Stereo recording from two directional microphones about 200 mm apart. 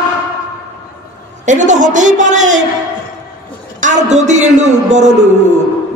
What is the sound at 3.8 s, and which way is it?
A man's voice, 35° right (ahead or behind).